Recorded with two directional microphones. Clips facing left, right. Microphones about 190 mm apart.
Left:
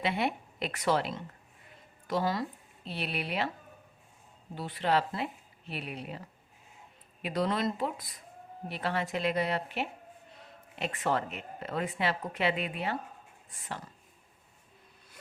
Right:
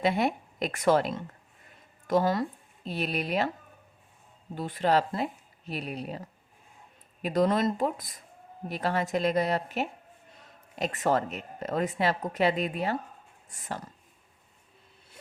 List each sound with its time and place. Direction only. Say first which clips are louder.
0.0 s a woman's voice: right 5 dB; 45° right (ahead or behind)
4.5 s a woman's voice: right 4 dB; 45° right (ahead or behind)